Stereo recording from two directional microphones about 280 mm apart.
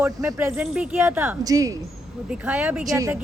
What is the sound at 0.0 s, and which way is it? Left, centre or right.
Speech, centre.